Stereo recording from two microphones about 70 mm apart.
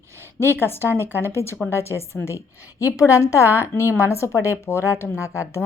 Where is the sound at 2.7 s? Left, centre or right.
Left.